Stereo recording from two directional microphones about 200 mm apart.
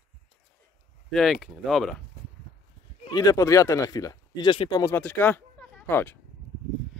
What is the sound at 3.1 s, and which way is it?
Speech, 20° left (ahead or behind).